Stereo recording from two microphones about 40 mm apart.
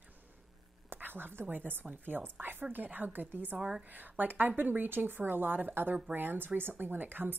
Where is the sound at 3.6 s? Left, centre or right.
Centre.